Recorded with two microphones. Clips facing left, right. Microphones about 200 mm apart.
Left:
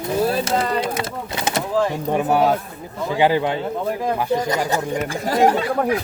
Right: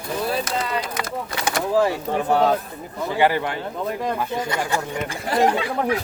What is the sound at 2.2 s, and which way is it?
A man's voice, 10° left (ahead or behind).